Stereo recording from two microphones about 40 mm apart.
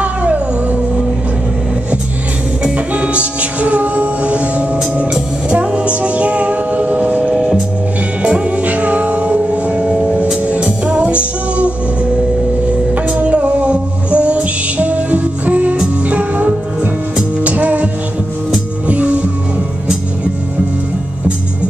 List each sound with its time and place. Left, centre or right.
0.0 s music: right
2.9 s music: right
7.3 s music: centre
8.3 s music: right
13.1 s music: right
18.9 s music: right